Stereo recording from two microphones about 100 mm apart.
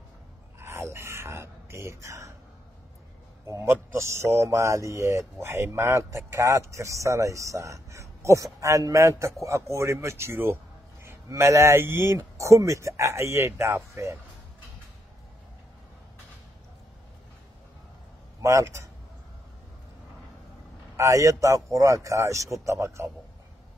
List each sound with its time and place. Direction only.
0.6 s speech: 30° right (ahead or behind)
3.4 s speech: 25° right (ahead or behind)
18.4 s a man's voice: 30° right (ahead or behind)
20.9 s a man's voice: 30° right (ahead or behind)